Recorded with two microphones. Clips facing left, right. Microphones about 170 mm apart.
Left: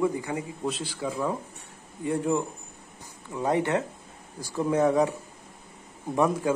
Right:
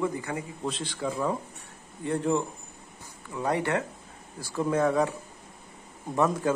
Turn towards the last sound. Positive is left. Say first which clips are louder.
# left 1 dB
turn(degrees=15)  # may be behind; listen again after turning